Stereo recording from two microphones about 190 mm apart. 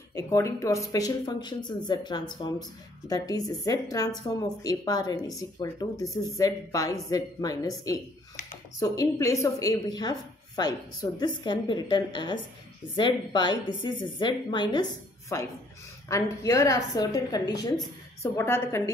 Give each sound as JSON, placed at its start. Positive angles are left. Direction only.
{"t": 0.1, "sound": "a woman's voice", "side_deg": 15}
{"t": 8.7, "sound": "a woman's voice", "side_deg": 20}